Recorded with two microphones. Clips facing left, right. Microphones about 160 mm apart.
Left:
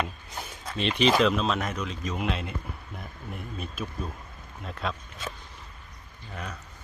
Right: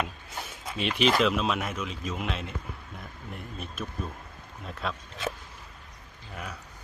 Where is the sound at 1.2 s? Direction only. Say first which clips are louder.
Left 2 dB; 5° right (ahead or behind).